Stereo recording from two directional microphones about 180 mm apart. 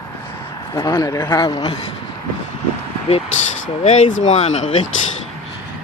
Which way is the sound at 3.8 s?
40° left (ahead or behind).